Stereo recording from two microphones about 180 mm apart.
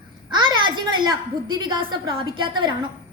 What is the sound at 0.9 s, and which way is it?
A woman's voice, 25° right (ahead or behind).